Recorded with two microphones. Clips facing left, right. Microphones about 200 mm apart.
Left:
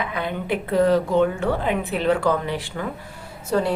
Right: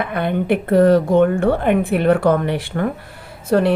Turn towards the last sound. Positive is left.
turn(degrees=-65)  # may be behind; listen again after turning